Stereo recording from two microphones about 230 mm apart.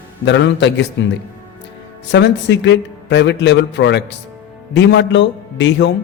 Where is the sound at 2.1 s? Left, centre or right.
Left.